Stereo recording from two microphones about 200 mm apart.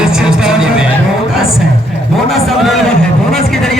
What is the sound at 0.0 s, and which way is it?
Music, 5° right (ahead or behind).